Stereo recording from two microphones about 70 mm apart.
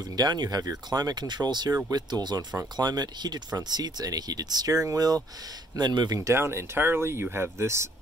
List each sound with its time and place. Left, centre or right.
0.2 s speech: right
1.9 s speech: right
3.7 s speech: right
6.3 s speech: right